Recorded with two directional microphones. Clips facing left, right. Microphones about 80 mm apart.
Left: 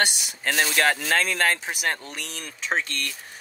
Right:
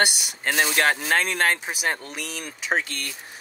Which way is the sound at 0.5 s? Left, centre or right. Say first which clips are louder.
Right 1 dB; centre.